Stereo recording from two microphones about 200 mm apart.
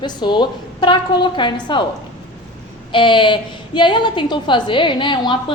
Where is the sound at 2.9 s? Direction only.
25° left (ahead or behind).